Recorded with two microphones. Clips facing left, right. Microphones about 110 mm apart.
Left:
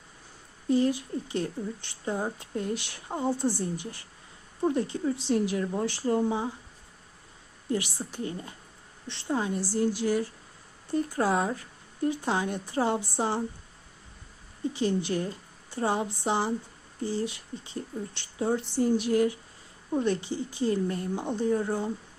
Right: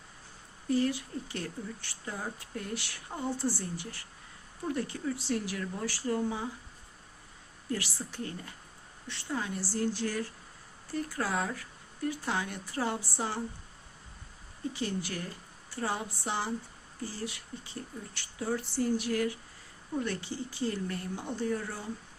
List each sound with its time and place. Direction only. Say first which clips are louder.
0.7 s a woman's voice: left 4 dB; 20° left (ahead or behind)
7.7 s a woman's voice: left 5 dB; 20° left (ahead or behind)
14.7 s a woman's voice: left 8 dB; 20° left (ahead or behind)